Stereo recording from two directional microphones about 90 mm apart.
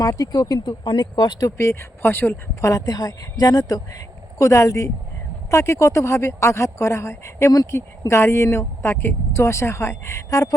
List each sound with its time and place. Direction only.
0.0 s speech: 45° left (ahead or behind)
0.9 s speech: 55° left (ahead or behind)
1.5 s speech: 35° left (ahead or behind)